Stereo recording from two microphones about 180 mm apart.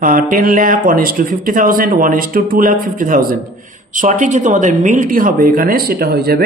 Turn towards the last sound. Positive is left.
turn(degrees=-60)  # may be behind; listen again after turning